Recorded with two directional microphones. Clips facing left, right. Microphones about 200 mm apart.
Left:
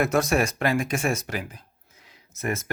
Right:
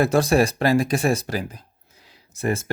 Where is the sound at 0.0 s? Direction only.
30° right (ahead or behind).